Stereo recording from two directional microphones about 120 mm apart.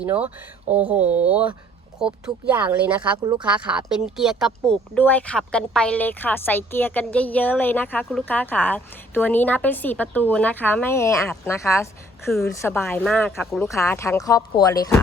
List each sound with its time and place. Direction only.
0.0 s speech: 15° right (ahead or behind)
4.7 s a woman's voice: 15° left (ahead or behind)